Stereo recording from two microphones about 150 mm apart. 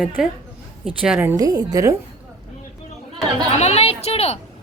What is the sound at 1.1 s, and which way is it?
Speech, 20° right (ahead or behind).